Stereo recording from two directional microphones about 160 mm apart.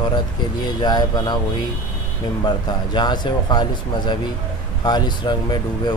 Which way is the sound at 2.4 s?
30° left (ahead or behind).